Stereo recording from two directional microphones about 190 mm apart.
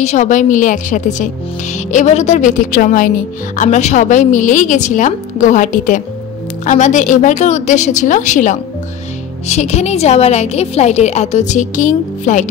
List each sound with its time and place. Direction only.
0.0 s speech: 40° left (ahead or behind)